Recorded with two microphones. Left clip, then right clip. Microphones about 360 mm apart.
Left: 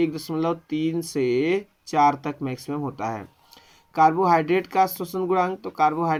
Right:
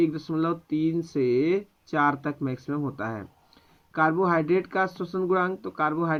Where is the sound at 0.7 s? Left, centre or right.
Left.